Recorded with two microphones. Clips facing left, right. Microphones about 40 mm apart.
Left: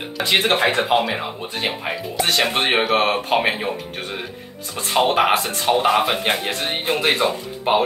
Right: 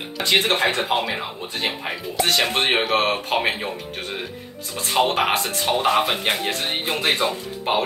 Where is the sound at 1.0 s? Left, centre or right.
Centre.